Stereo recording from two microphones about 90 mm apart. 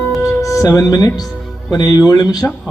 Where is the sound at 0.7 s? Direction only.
40° left (ahead or behind).